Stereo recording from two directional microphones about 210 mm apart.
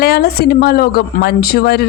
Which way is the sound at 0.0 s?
45° left (ahead or behind).